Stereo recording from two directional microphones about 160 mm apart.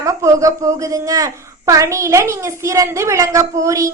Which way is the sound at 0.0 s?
20° right (ahead or behind).